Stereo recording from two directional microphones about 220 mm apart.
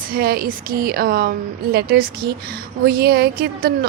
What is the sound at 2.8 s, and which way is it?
A woman's voice, 45° right (ahead or behind).